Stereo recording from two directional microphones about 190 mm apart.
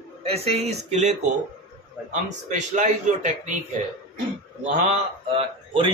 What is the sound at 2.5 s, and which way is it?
A man's voice, 40° right (ahead or behind).